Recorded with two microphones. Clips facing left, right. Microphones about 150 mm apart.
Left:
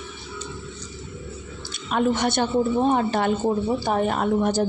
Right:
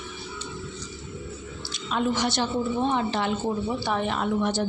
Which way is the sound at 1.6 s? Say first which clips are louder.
Left 4 dB; 50° left (ahead or behind).